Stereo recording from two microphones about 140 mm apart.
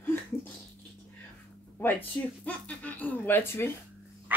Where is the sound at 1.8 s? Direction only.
10° left (ahead or behind).